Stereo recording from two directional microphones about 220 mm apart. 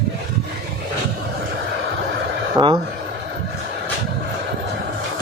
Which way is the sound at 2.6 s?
15° right (ahead or behind).